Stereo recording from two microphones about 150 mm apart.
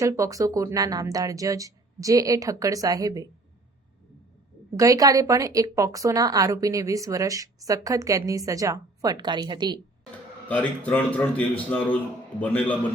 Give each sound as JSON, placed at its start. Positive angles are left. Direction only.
{"t": 0.0, "sound": "speech", "side_deg": -20}
{"t": 4.8, "sound": "speech", "side_deg": -20}
{"t": 10.5, "sound": "a man's voice", "side_deg": 10}